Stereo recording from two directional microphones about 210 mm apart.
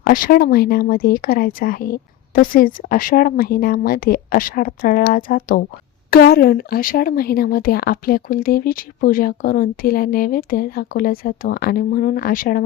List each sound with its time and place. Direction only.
0.0 s speech: 40° left (ahead or behind)